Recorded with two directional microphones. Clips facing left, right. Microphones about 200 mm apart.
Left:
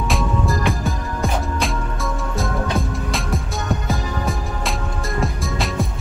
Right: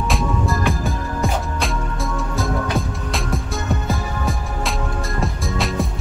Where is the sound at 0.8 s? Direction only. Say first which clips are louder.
Right 1 dB; centre (ahead or behind).